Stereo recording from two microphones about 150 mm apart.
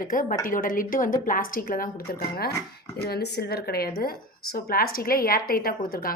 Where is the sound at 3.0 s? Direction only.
90° left.